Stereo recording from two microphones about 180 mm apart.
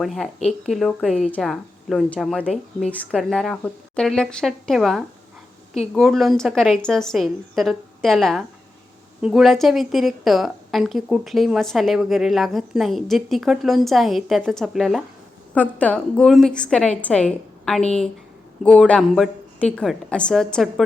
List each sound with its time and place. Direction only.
0.0 s a woman's voice: centre (ahead or behind)
0.3 s speech: 35° left (ahead or behind)
0.7 s a woman's voice: centre (ahead or behind)